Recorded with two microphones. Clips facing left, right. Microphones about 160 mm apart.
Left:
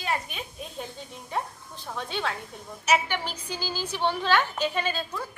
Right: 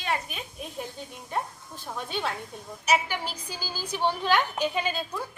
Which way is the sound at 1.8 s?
10° right (ahead or behind).